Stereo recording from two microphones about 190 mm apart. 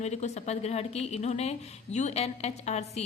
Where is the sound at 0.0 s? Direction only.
35° left (ahead or behind).